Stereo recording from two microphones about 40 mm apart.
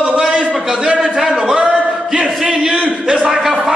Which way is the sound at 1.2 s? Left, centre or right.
Centre.